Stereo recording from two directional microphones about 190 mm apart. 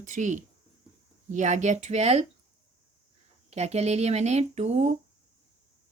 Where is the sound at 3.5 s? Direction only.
35° right (ahead or behind).